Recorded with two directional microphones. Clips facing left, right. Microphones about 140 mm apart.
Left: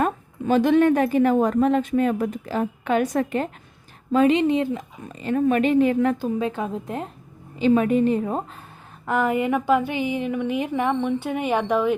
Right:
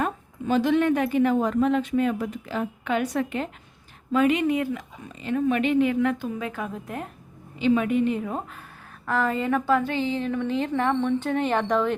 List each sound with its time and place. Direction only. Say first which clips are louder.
0.0 s a woman's voice: left 4 dB; 55° left (ahead or behind)
4.1 s speech: left 3 dB; 30° left (ahead or behind)
5.0 s a woman's voice: left 3 dB; 45° left (ahead or behind); by 7.1 s 25° left (ahead or behind)
7.6 s a woman's voice: left 3 dB; 40° left (ahead or behind)
9.0 s a woman's voice: left 3 dB; 15° left (ahead or behind)